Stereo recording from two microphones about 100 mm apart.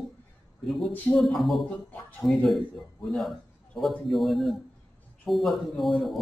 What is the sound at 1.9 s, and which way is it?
Speech, 15° left (ahead or behind).